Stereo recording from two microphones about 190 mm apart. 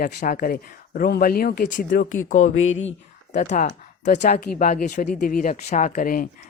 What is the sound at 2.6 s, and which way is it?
Speech, 90° left.